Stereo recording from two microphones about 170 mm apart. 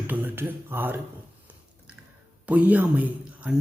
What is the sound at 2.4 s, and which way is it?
Speech, 10° right (ahead or behind).